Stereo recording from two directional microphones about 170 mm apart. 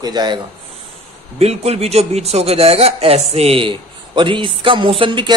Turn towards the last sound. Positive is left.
turn(degrees=-30)  # may be behind; listen again after turning